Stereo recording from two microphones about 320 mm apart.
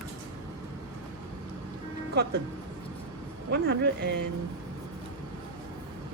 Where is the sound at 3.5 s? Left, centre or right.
Right.